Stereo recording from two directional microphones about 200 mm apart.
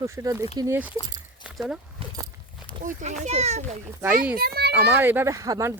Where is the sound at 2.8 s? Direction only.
35° right (ahead or behind).